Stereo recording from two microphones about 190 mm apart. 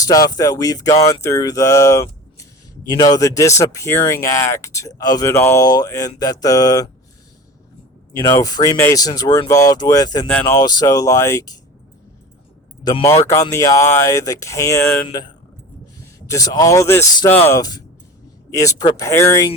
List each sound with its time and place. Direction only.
0.0 s speech: 20° left (ahead or behind)
8.2 s speech: 20° left (ahead or behind)
12.8 s speech: 20° left (ahead or behind)
16.2 s speech: 15° left (ahead or behind)